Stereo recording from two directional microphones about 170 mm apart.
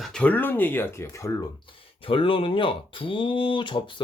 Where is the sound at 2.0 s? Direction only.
30° left (ahead or behind).